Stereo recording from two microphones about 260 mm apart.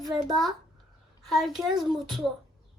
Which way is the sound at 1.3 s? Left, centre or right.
Centre.